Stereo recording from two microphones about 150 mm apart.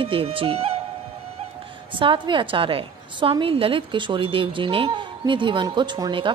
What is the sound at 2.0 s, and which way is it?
A woman's voice, 35° right (ahead or behind).